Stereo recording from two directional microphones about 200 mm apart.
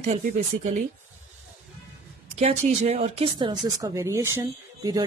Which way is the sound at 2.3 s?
35° right (ahead or behind).